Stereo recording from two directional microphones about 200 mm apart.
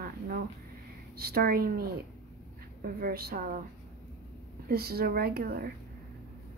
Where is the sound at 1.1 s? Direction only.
50° right (ahead or behind).